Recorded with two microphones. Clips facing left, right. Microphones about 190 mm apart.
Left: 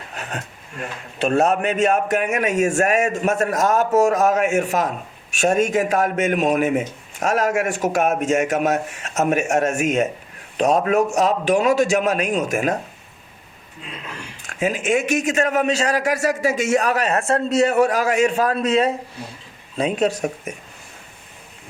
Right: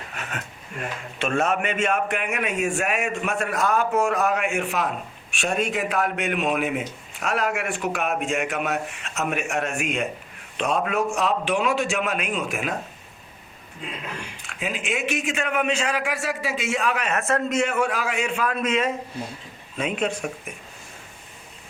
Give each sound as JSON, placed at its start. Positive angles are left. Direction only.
{"t": 0.2, "sound": "a man's voice", "side_deg": 35}
{"t": 14.4, "sound": "a man's voice", "side_deg": 45}